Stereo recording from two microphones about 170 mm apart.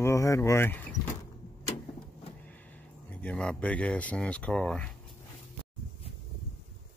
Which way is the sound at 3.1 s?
5° left (ahead or behind).